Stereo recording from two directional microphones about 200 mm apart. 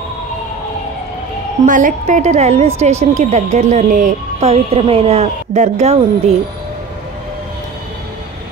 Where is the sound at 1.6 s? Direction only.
40° right (ahead or behind).